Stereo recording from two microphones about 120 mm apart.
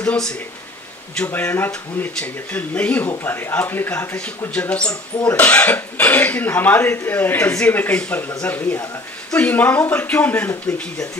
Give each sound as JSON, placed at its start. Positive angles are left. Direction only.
{"t": 0.0, "sound": "speech", "side_deg": 10}